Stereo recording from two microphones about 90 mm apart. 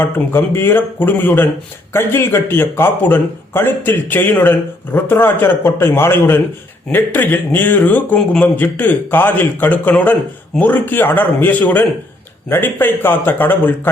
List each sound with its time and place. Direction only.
0.0 s a man's voice: 25° left (ahead or behind)